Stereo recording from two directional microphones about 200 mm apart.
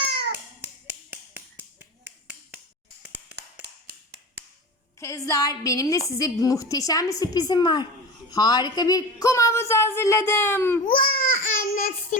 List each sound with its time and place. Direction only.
0.0 s a sound: 55° right (ahead or behind)
0.9 s finger snapping: 10° right (ahead or behind)
3.8 s tap: 55° right (ahead or behind)
4.9 s a woman's voice: 15° left (ahead or behind)
10.8 s babbling: 45° left (ahead or behind)